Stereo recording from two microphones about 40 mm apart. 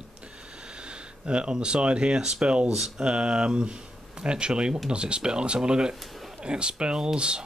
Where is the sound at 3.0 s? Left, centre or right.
Right.